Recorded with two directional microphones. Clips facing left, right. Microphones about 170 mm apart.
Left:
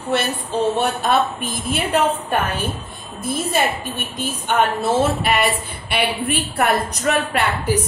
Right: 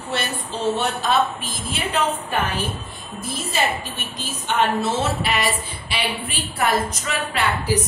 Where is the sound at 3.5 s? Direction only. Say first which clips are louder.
Left 1 dB; 55° left (ahead or behind).